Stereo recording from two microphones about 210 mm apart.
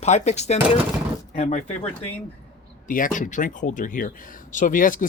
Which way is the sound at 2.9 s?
40° left (ahead or behind).